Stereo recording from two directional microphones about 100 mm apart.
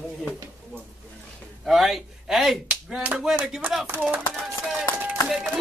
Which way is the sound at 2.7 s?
15° right (ahead or behind).